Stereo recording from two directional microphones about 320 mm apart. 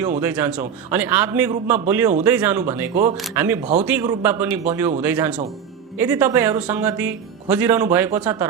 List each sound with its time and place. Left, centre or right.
0.2 s speech: centre
2.9 s a man's voice: right
3.2 s speech: centre